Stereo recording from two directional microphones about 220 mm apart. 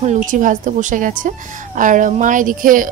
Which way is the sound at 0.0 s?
35° right (ahead or behind).